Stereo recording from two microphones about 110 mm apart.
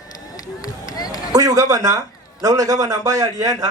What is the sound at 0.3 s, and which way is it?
Run, 35° left (ahead or behind).